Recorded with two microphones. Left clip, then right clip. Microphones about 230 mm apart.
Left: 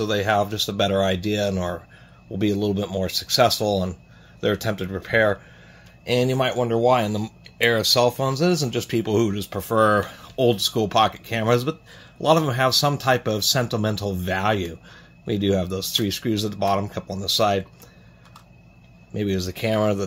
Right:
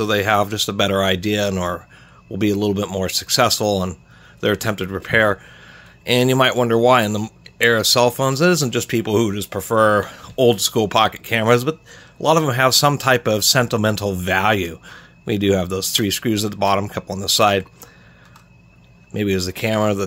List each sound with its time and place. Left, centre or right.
0.0 s speech: right
19.1 s speech: right